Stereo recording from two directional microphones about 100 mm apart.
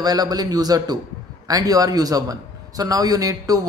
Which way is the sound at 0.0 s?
40° right (ahead or behind).